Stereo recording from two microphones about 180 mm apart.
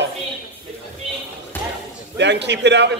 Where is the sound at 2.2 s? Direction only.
75° right (ahead or behind).